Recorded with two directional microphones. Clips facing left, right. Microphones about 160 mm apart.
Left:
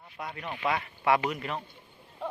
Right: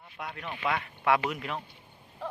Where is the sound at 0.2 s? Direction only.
5° left (ahead or behind).